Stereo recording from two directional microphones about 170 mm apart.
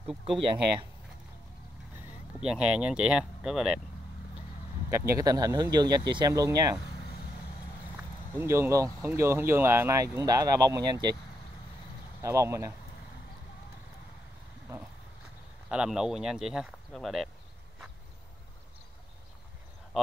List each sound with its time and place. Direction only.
0.0 s speech: centre (ahead or behind)
2.4 s speech: 5° right (ahead or behind)
4.9 s speech: 20° right (ahead or behind)
8.4 s speech: 15° right (ahead or behind)
12.2 s speech: 15° right (ahead or behind)
15.7 s speech: 5° right (ahead or behind)